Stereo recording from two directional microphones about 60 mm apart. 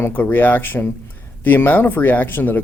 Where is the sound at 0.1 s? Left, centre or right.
Left.